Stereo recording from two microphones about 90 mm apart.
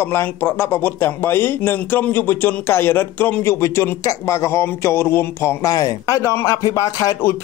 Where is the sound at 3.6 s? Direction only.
35° left (ahead or behind).